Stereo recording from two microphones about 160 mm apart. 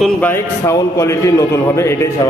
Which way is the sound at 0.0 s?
10° left (ahead or behind).